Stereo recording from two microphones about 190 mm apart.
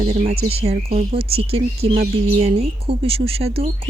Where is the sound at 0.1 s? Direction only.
35° right (ahead or behind).